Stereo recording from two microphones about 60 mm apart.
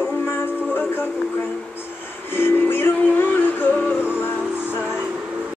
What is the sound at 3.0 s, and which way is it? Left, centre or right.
Music, left.